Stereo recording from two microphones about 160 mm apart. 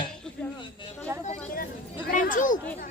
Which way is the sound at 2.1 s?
55° left (ahead or behind).